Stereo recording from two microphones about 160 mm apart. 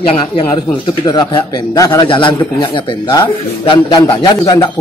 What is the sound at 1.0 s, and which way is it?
A man's voice, 25° left (ahead or behind).